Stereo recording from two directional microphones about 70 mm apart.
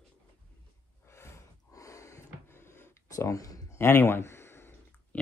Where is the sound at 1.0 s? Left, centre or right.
Left.